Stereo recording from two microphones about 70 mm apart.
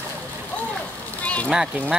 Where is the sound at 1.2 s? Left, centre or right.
Centre.